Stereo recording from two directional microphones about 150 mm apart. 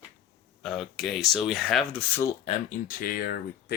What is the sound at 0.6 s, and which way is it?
Speech, centre (ahead or behind).